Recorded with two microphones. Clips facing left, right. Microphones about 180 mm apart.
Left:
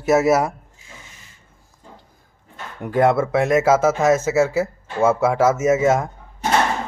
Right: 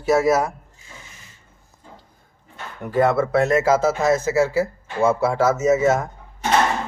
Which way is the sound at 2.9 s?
10° left (ahead or behind).